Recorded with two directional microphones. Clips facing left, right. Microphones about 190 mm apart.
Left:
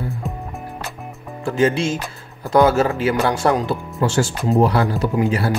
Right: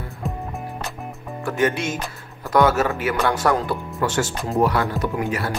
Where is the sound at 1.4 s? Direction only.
30° left (ahead or behind).